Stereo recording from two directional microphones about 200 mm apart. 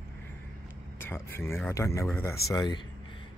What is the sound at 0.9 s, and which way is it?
Speech, 10° left (ahead or behind).